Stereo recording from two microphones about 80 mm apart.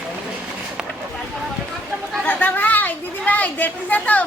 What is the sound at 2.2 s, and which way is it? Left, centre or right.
Chatter, left.